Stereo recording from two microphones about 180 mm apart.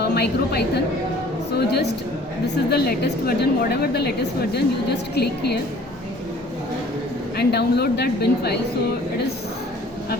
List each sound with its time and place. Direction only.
0.0 s a woman's voice: 60° left (ahead or behind)
7.3 s a woman's voice: 65° left (ahead or behind)